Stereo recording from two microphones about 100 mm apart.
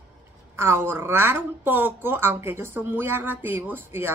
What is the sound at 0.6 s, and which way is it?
Speech, 25° right (ahead or behind).